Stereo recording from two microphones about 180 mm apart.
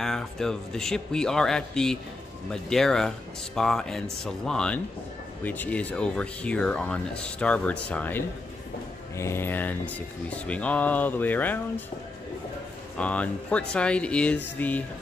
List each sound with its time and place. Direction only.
0.0 s speech: centre (ahead or behind)
12.9 s speech: 5° left (ahead or behind)